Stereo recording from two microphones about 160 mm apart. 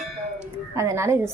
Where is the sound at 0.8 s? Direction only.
20° right (ahead or behind).